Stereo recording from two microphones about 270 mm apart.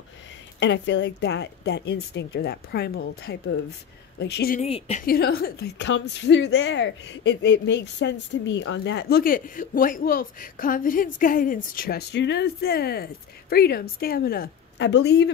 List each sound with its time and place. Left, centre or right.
0.6 s a woman's voice: left
4.6 s a woman's voice: left